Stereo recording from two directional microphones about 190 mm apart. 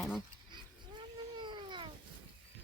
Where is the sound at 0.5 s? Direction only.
25° right (ahead or behind).